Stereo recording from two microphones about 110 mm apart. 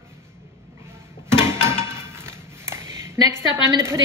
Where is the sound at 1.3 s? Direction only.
25° right (ahead or behind).